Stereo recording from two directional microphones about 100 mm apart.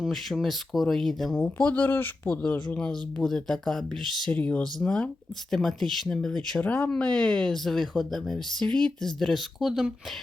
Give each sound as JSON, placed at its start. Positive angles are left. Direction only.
{"t": 0.0, "sound": "speech", "side_deg": 0}
{"t": 1.4, "sound": "speech", "side_deg": 15}
{"t": 4.3, "sound": "speech", "side_deg": 15}